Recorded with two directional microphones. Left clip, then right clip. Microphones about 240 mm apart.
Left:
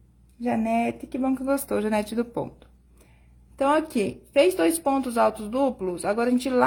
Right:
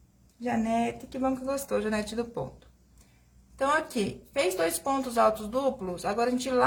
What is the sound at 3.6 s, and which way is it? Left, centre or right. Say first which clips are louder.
Speech: left 4 dB; left.